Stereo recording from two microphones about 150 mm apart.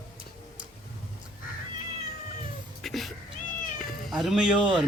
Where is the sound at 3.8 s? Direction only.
Centre (ahead or behind).